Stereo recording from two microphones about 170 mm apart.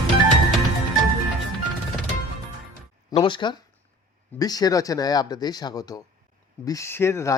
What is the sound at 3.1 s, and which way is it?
Speech, 30° left (ahead or behind).